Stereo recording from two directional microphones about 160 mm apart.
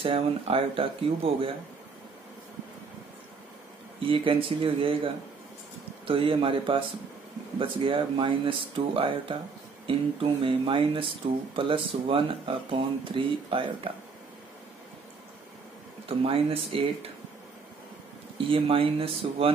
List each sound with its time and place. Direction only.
0.0 s speech: 35° right (ahead or behind)
4.0 s speech: 35° right (ahead or behind)
16.1 s speech: 35° right (ahead or behind)
18.5 s speech: 35° right (ahead or behind)